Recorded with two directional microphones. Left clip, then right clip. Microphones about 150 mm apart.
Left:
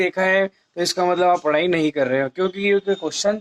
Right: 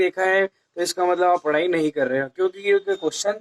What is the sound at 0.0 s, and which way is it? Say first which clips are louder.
Speech: left 1 dB; 25° left (ahead or behind).